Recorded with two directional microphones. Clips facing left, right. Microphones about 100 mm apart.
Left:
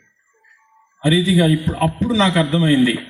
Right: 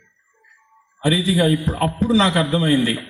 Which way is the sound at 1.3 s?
35° right (ahead or behind).